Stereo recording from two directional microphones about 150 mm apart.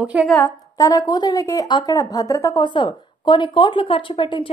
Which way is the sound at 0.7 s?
25° left (ahead or behind).